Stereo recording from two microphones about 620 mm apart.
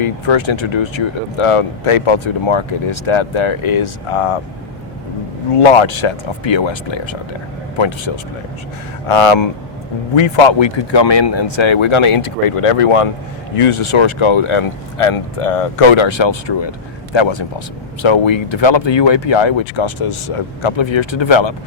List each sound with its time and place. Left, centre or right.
0.0 s speech: left
5.5 s speech: left